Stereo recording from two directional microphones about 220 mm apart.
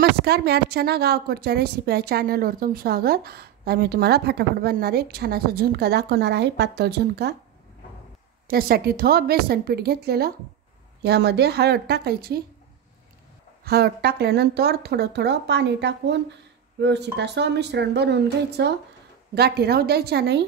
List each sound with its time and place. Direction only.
0.2 s a woman's voice: 45° right (ahead or behind)
8.5 s a woman's voice: 45° right (ahead or behind)
13.7 s a woman's voice: 45° right (ahead or behind)